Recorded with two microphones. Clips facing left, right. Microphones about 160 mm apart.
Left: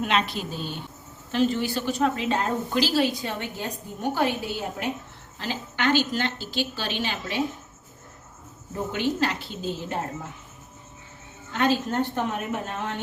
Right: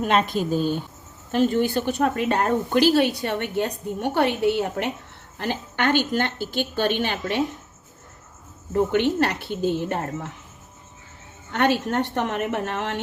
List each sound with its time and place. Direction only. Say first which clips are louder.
0.0 s a woman's voice: right 4 dB; 50° right (ahead or behind); by 4.9 s 65° right (ahead or behind)
5.4 s a woman's voice: right 3 dB; 55° right (ahead or behind)
8.7 s a woman's voice: right 7 dB; 65° right (ahead or behind)
11.5 s a woman's voice: right 2 dB; 65° right (ahead or behind)